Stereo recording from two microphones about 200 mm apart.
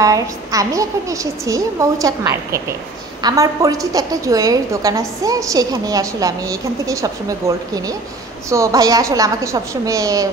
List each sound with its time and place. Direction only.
0.0 s a woman's voice: 15° right (ahead or behind)